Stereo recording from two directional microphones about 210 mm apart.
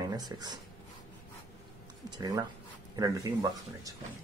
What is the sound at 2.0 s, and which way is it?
Speech, 20° right (ahead or behind).